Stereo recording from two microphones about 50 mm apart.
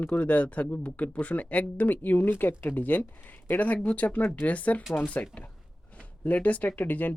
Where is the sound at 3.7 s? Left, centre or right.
Left.